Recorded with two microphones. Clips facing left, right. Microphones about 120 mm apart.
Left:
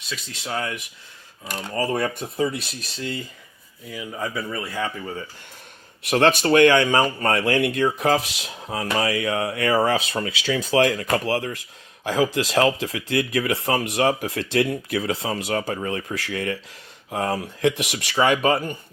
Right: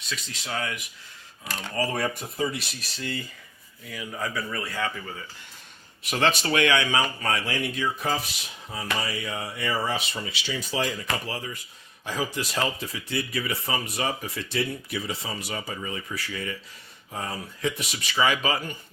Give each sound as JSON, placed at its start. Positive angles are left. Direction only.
{"t": 0.4, "sound": "speech", "side_deg": 30}
{"t": 1.7, "sound": "speech", "side_deg": 25}
{"t": 6.0, "sound": "speech", "side_deg": 60}
{"t": 6.4, "sound": "speech", "side_deg": 40}
{"t": 12.0, "sound": "speech", "side_deg": 90}